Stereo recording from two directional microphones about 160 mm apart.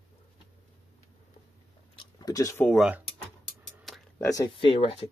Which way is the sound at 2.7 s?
Centre (ahead or behind).